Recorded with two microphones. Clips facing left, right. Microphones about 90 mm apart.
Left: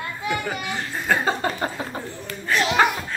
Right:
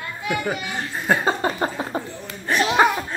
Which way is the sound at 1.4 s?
20° right (ahead or behind).